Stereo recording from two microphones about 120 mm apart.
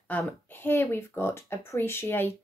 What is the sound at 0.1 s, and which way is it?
Speech, 10° left (ahead or behind).